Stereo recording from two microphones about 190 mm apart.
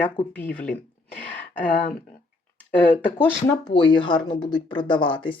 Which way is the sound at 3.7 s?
25° left (ahead or behind).